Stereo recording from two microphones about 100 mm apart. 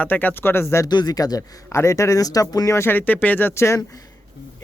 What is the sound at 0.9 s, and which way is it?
A man's voice, 45° left (ahead or behind).